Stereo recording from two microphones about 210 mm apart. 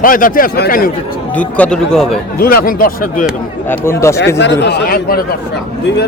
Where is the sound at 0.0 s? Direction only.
40° left (ahead or behind).